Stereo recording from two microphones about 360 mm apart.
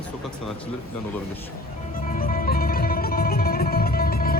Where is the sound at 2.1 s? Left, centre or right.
Left.